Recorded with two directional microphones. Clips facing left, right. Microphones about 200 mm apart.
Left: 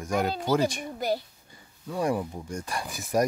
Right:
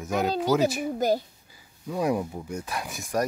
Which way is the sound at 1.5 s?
5° right (ahead or behind).